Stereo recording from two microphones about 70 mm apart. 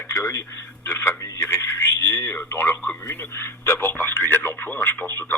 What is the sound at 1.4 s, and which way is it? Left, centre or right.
Radio, left.